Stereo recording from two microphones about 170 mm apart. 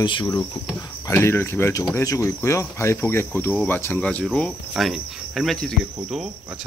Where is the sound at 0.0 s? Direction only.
25° left (ahead or behind).